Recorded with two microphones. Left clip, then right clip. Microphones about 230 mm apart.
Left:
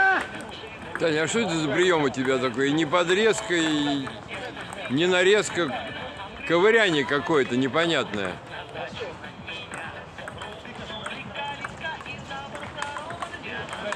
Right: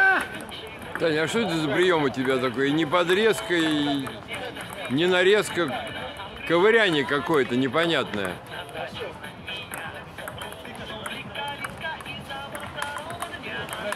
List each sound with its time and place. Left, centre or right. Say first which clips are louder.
0.9 s speech: even; centre
5.7 s a sound: right 1 dB; right
6.4 s speech: even; centre
11.1 s vehicle: right 1 dB; right
12.8 s run: even; right